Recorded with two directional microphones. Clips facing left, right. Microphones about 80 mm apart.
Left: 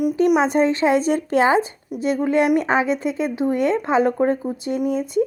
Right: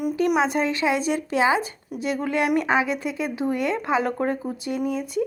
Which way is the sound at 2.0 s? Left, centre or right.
Left.